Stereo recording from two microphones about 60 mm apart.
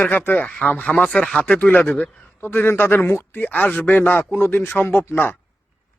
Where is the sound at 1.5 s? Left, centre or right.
Left.